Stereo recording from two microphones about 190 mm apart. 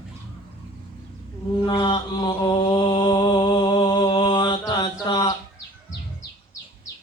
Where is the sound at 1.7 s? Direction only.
25° left (ahead or behind).